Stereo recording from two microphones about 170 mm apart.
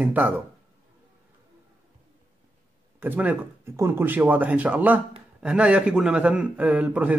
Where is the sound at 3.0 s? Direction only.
10° right (ahead or behind).